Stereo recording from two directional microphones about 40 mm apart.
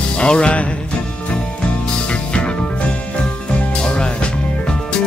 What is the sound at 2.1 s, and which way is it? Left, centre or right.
Music, left.